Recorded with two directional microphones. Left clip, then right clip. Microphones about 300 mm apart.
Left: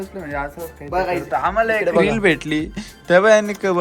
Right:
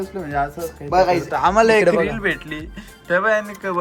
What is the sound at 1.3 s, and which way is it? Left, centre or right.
Speech, centre.